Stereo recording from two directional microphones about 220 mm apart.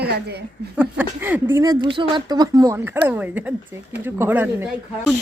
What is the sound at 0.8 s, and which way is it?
Speech, 5° right (ahead or behind).